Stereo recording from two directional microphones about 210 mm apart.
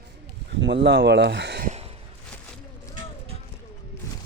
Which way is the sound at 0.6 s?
55° right (ahead or behind).